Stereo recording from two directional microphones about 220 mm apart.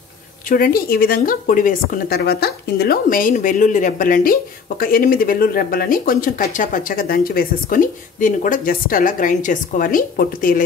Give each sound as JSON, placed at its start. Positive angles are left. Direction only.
{"t": 0.5, "sound": "speech", "side_deg": 40}